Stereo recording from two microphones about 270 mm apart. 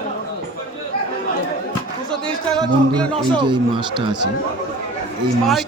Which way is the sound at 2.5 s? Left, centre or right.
Centre.